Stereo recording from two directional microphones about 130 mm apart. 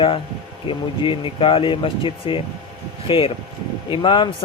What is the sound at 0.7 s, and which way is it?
A man's voice, 40° left (ahead or behind).